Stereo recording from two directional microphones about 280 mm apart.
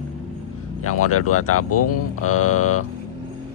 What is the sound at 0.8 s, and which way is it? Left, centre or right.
Speech, left.